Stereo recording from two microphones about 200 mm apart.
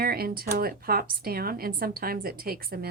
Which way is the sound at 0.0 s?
50° right (ahead or behind).